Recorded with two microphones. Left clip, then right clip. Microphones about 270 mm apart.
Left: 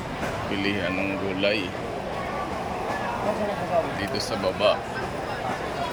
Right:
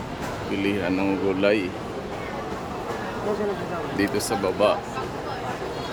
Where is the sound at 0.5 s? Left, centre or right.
Centre.